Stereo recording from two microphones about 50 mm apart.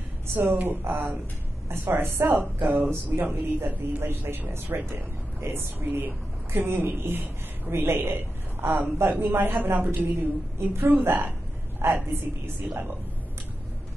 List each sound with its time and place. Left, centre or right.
0.3 s a woman's voice: right
0.6 s speech: right
2.3 s speech: right
11.8 s a woman's voice: right
12.7 s speech: right